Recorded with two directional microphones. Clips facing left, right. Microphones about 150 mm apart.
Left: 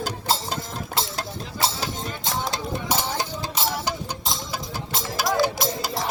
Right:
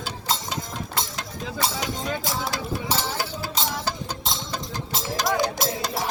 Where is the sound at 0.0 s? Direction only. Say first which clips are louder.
Left 3 dB; 35° left (ahead or behind).